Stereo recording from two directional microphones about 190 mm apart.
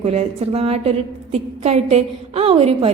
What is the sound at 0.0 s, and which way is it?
A woman's voice, 35° right (ahead or behind).